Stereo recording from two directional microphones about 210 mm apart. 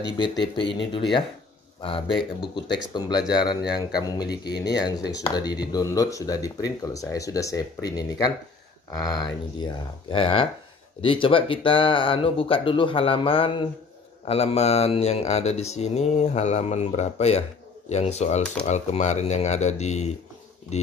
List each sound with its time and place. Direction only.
0.2 s speech: 20° left (ahead or behind)
4.6 s speech: 50° left (ahead or behind)
5.1 s speech: 20° left (ahead or behind)